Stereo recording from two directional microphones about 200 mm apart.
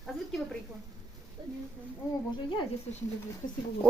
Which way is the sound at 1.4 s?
25° right (ahead or behind).